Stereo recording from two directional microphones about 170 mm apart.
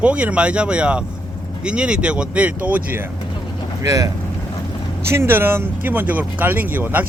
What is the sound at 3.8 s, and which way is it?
Speech, 20° right (ahead or behind).